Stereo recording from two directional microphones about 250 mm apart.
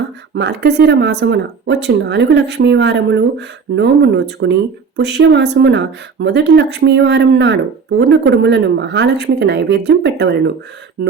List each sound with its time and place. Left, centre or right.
0.3 s speech: right